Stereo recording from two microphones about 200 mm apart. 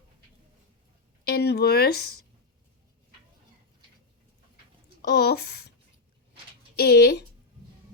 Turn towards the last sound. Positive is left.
turn(degrees=55)  # may be behind; listen again after turning